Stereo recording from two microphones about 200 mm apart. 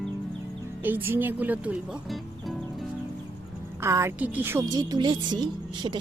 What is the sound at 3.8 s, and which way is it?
A woman's voice, 15° right (ahead or behind).